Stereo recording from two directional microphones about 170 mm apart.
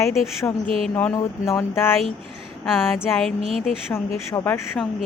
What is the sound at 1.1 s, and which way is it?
Speech, 15° left (ahead or behind).